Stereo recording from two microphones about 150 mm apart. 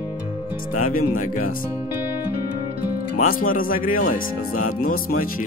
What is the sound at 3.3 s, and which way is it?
Speech, 70° left (ahead or behind).